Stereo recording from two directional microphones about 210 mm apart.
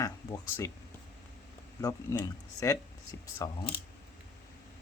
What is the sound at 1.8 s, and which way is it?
Speech, 15° left (ahead or behind).